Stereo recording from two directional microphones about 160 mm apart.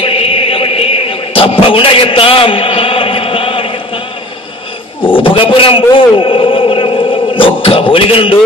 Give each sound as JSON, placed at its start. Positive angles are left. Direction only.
{"t": 0.0, "sound": "chant", "side_deg": 35}
{"t": 5.0, "sound": "a man's voice", "side_deg": 35}